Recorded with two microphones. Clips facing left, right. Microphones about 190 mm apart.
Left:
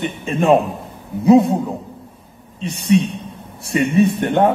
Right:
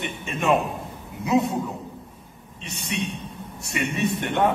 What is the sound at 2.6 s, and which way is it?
Speech, 35° left (ahead or behind).